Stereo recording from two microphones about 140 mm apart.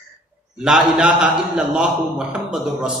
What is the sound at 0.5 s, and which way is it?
A man's voice, 5° right (ahead or behind).